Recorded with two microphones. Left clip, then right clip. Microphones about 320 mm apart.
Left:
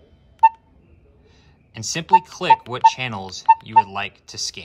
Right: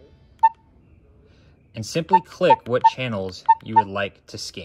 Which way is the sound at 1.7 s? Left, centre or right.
Centre.